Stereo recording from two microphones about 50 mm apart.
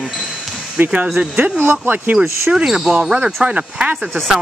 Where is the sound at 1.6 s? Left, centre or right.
Right.